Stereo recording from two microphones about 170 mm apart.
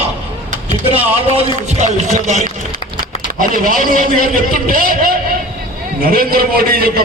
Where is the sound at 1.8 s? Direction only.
45° right (ahead or behind).